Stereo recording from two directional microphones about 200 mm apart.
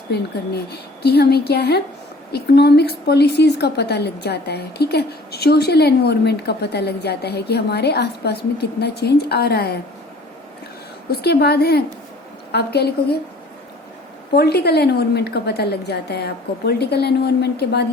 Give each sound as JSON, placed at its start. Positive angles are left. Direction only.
{"t": 0.1, "sound": "a woman's voice", "side_deg": 55}
{"t": 11.1, "sound": "a woman's voice", "side_deg": 55}
{"t": 14.3, "sound": "a woman's voice", "side_deg": 55}